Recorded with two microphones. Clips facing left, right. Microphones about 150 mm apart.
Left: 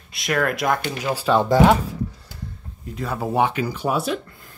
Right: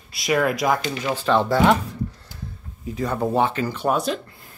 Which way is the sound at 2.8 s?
Centre (ahead or behind).